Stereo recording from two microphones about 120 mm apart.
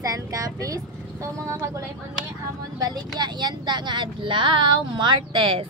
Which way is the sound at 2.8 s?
35° right (ahead or behind).